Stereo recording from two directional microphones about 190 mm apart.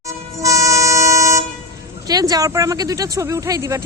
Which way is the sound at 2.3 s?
20° right (ahead or behind).